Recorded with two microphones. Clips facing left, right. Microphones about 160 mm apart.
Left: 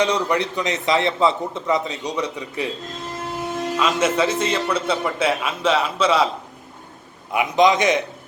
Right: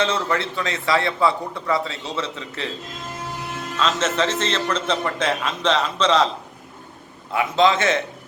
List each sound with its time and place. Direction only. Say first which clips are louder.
0.0 s a man's voice: left 2 dB; 15° left (ahead or behind)
3.8 s a man's voice: left 2 dB; 10° left (ahead or behind)